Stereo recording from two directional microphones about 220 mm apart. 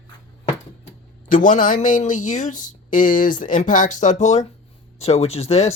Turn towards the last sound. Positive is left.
turn(degrees=30)  # may be behind; listen again after turning